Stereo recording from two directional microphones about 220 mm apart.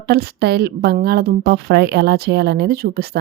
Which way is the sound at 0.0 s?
45° right (ahead or behind).